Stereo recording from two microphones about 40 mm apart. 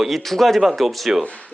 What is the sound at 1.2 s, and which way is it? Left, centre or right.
Speech, left.